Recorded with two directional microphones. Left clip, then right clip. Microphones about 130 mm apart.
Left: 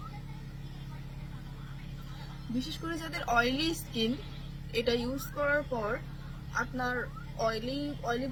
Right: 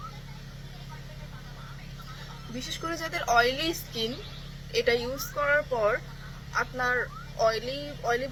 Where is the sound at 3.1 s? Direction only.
35° left (ahead or behind).